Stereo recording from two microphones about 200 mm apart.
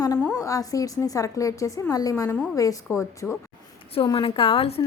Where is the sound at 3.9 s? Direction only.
25° left (ahead or behind).